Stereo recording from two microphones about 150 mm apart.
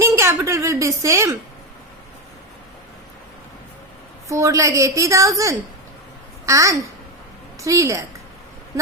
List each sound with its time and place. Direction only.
0.0 s a woman's voice: 20° right (ahead or behind)
4.3 s a woman's voice: 20° right (ahead or behind)